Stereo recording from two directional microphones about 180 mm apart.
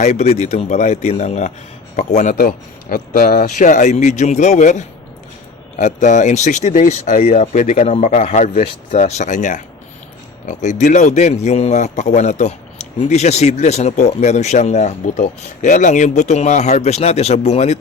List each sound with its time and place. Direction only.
0.0 s a man's voice: 40° left (ahead or behind)